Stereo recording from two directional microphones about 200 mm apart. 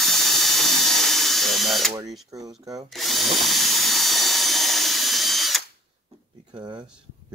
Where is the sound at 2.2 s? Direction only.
15° right (ahead or behind).